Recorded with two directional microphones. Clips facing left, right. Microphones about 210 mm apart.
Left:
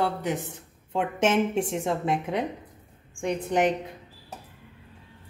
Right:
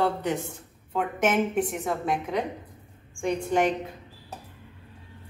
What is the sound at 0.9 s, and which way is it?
A woman's voice, 30° left (ahead or behind).